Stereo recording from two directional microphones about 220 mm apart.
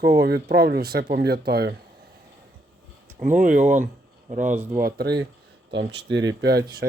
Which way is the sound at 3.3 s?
35° right (ahead or behind).